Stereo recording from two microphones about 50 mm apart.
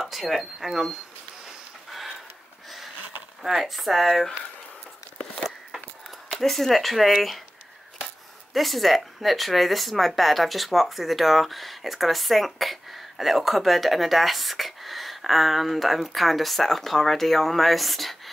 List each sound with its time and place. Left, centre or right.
0.0 s speech: centre
3.4 s speech: centre
6.3 s speech: centre
8.5 s speech: centre